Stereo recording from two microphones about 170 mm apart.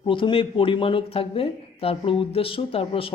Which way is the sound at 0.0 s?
30° left (ahead or behind).